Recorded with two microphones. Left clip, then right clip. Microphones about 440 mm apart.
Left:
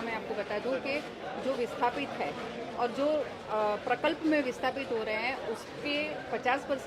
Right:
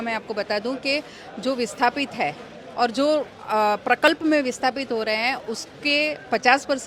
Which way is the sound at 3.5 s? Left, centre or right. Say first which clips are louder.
Right 10 dB; right.